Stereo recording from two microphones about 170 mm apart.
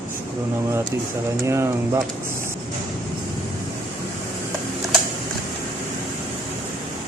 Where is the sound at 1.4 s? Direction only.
15° right (ahead or behind).